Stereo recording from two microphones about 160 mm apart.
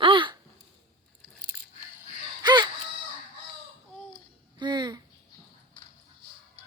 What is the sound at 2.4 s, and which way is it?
Wail, 25° right (ahead or behind).